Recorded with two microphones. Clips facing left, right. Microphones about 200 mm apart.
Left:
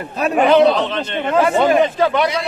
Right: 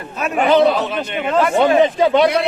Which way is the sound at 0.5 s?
5° right (ahead or behind).